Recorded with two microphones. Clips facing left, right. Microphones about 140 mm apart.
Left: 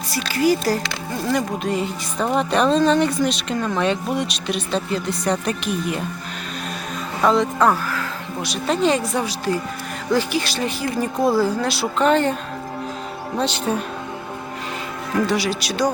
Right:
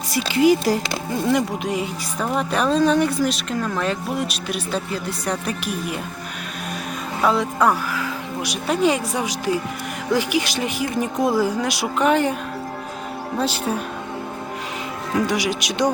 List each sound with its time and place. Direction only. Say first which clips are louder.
0.1 s speech: right 3 dB; 20° right (ahead or behind)
7.3 s speech: left 2 dB; 10° right (ahead or behind)
13.7 s speech: left 2 dB; 5° right (ahead or behind)
15.3 s speech: left 1 dB; 15° right (ahead or behind)